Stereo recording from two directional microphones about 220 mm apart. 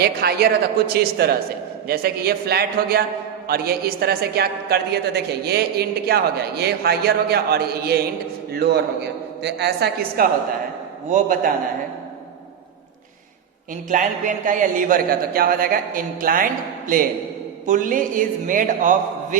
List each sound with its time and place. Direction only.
0.0 s a woman's voice: 45° right (ahead or behind)
13.9 s a man's voice: 35° right (ahead or behind)